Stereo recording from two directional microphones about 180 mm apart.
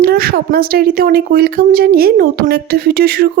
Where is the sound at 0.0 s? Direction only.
60° right (ahead or behind).